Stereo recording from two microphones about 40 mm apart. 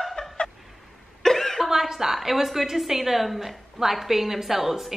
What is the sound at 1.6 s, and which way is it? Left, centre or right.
A woman's voice, centre.